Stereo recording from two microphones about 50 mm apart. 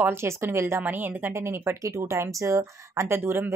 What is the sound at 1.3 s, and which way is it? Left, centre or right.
Speech, right.